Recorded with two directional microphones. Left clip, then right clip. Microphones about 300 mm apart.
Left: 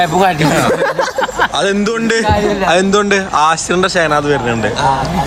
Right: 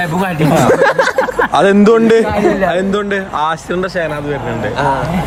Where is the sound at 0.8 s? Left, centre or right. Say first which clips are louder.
Right 3 dB; right.